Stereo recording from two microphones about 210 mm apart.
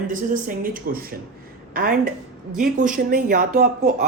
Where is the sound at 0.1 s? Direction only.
40° right (ahead or behind).